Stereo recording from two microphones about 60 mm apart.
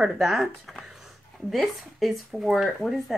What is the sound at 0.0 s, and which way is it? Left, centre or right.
Speech, centre.